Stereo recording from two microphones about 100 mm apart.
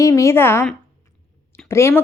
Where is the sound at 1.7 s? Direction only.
25° left (ahead or behind).